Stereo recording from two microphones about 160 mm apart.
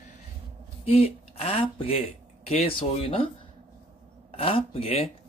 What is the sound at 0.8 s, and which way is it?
Speech, 40° left (ahead or behind).